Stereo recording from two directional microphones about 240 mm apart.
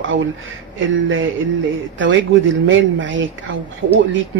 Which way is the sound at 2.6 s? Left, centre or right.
Right.